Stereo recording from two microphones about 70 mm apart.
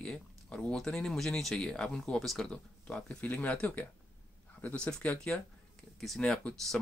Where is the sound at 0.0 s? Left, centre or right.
Centre.